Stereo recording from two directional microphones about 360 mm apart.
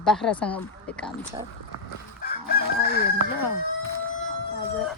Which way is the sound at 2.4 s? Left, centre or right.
Left.